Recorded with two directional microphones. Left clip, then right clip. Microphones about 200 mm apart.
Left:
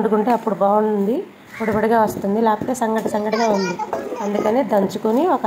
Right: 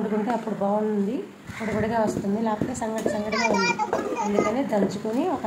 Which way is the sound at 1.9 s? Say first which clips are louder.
Left 7 dB; 20° left (ahead or behind).